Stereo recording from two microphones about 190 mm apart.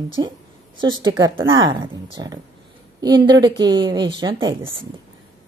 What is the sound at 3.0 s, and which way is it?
A woman's voice, 20° right (ahead or behind).